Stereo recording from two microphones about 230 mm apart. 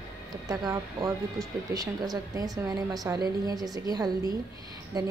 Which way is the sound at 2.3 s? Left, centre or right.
Centre.